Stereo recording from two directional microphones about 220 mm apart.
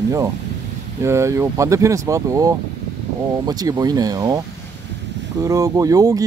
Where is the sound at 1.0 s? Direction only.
15° right (ahead or behind).